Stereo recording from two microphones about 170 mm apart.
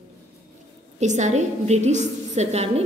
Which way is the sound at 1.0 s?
45° right (ahead or behind).